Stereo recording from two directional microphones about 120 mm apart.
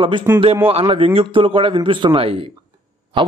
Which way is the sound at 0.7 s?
50° right (ahead or behind).